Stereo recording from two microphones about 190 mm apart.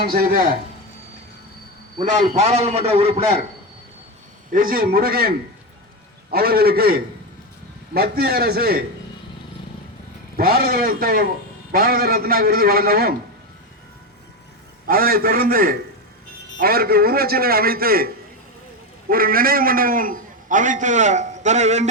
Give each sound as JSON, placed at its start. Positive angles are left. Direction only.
{"t": 0.1, "sound": "a man's voice", "side_deg": -50}
{"t": 2.0, "sound": "a man's voice", "side_deg": -35}
{"t": 4.5, "sound": "a man's voice", "side_deg": -50}
{"t": 6.3, "sound": "a man's voice", "side_deg": -55}
{"t": 10.3, "sound": "a man's voice", "side_deg": -50}
{"t": 14.8, "sound": "a man's voice", "side_deg": -50}